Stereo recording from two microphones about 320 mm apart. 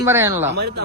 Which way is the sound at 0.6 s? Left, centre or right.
Right.